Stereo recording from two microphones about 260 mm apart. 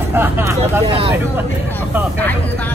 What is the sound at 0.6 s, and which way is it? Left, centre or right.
Vehicle, right.